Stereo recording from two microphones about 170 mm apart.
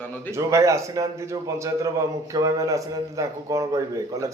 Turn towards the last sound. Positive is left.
turn(degrees=-20)  # may be behind; listen again after turning